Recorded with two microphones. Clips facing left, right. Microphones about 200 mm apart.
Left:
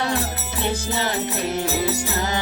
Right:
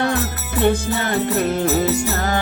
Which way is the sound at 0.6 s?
55° right (ahead or behind).